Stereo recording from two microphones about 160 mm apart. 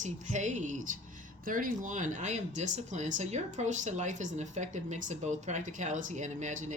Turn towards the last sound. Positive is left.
turn(degrees=-50)  # may be behind; listen again after turning